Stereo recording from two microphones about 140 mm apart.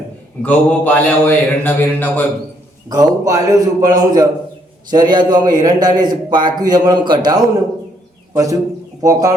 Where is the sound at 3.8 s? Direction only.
25° right (ahead or behind).